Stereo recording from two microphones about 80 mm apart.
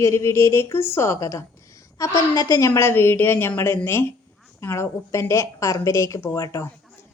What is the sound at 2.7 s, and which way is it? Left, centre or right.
A woman's voice, left.